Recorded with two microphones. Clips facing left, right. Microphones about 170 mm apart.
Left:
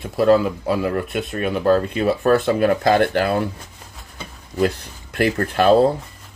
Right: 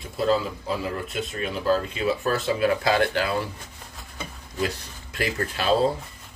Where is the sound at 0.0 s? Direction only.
65° left (ahead or behind).